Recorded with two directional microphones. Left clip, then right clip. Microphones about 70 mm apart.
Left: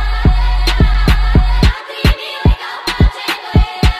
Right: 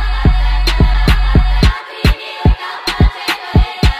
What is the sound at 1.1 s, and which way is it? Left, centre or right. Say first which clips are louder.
Music: even; centre.